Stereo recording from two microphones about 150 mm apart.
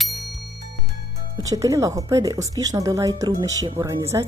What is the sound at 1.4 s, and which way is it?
A woman's voice, 20° right (ahead or behind).